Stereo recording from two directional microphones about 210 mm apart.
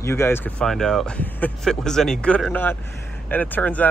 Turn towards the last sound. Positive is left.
turn(degrees=5)  # may be behind; listen again after turning